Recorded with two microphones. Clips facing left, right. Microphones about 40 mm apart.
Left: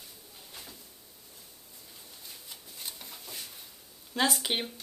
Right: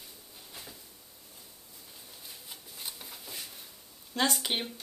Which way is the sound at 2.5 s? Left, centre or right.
Centre.